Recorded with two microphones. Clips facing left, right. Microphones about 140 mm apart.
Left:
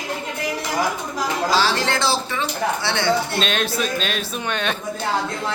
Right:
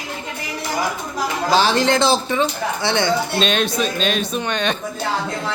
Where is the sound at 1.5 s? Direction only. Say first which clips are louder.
Right 7 dB; 20° right (ahead or behind).